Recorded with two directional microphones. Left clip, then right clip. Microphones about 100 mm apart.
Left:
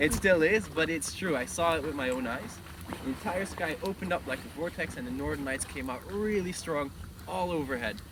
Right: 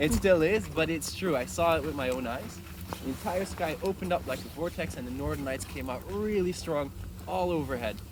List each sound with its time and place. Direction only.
0.0 s speech: 35° right (ahead or behind)